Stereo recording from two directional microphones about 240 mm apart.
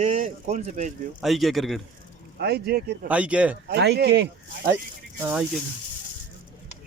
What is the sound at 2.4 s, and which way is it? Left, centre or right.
Speech, right.